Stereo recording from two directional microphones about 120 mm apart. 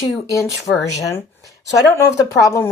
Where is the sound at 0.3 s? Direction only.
25° left (ahead or behind).